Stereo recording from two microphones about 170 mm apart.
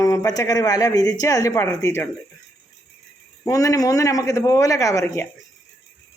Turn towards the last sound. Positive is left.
turn(degrees=20)  # may be behind; listen again after turning